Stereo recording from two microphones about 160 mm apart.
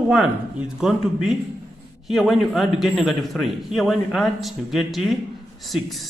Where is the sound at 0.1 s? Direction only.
5° right (ahead or behind).